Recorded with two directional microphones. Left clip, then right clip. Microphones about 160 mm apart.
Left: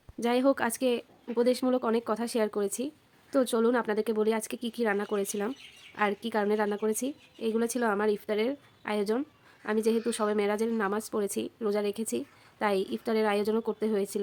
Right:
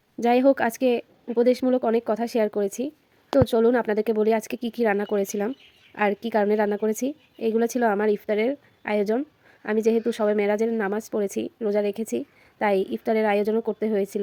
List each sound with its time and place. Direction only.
0.2 s a woman's voice: 25° right (ahead or behind)